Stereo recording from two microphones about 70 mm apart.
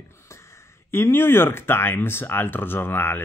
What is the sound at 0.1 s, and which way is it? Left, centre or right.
Speech, left.